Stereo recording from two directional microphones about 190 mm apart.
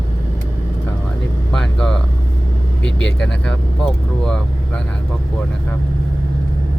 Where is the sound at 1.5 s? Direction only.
5° left (ahead or behind).